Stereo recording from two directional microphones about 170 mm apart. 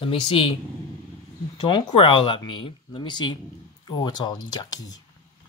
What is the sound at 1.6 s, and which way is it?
Speech, 30° left (ahead or behind).